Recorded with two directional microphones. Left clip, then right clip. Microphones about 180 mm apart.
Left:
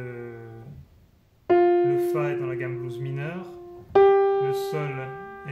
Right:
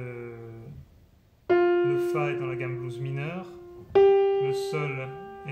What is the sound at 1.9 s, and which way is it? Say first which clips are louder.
A man's voice: left 2 dB; 5° left (ahead or behind).